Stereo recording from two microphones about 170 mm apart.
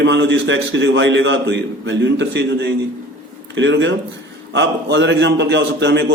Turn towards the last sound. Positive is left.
turn(degrees=-90)